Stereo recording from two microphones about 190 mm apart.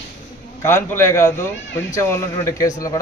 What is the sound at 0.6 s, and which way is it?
A man's voice, 10° left (ahead or behind).